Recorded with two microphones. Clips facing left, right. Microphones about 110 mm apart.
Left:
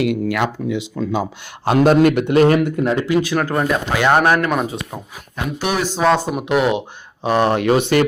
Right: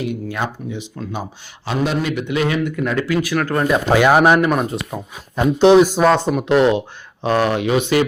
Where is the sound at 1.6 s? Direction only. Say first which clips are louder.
Left 8 dB; 50° left (ahead or behind).